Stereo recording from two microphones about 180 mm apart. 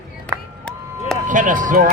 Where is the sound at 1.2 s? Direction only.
45° right (ahead or behind).